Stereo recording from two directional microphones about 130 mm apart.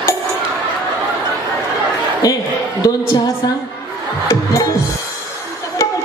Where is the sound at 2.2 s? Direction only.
25° left (ahead or behind).